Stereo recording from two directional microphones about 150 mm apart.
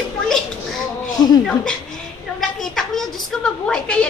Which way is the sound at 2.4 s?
Centre (ahead or behind).